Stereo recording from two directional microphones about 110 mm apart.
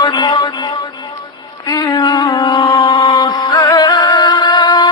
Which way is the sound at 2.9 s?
45° left (ahead or behind).